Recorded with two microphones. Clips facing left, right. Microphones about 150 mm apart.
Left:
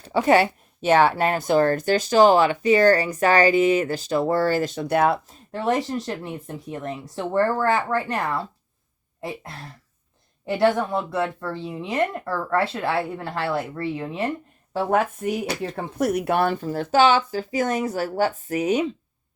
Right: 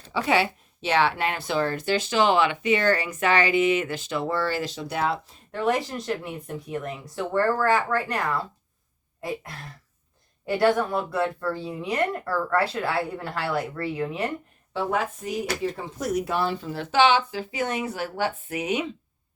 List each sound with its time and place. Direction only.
0.1 s a woman's voice: 45° left (ahead or behind)
5.5 s a woman's voice: 35° left (ahead or behind)
10.4 s speech: 20° left (ahead or behind)
14.7 s speech: 50° left (ahead or behind)